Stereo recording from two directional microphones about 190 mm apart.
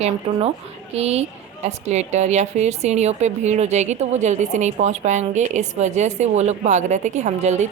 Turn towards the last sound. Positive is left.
turn(degrees=-35)  # may be behind; listen again after turning